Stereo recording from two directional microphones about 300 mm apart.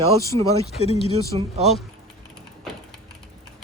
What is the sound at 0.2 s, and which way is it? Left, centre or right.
Speech, centre.